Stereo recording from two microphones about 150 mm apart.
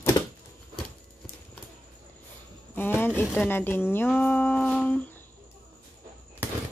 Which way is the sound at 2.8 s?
15° left (ahead or behind).